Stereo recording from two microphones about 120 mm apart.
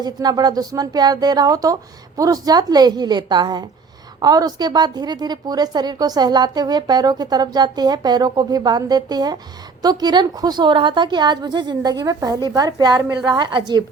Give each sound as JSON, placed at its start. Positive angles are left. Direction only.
{"t": 0.0, "sound": "a woman's voice", "side_deg": -35}